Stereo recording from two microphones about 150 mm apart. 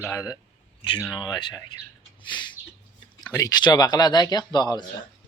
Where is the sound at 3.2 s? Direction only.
25° left (ahead or behind).